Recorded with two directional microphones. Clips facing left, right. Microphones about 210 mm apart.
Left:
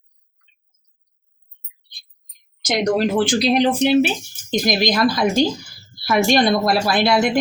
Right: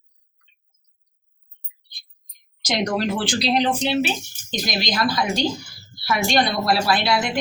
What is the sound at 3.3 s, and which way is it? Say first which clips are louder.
Speech: left 5 dB; 55° left (ahead or behind).